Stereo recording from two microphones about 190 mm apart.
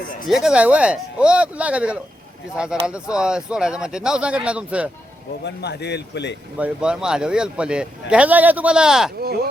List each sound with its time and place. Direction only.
0.3 s a man's voice: centre (ahead or behind)
5.5 s speech: 60° left (ahead or behind)
6.6 s a man's voice: 5° right (ahead or behind)
9.2 s speech: 55° right (ahead or behind)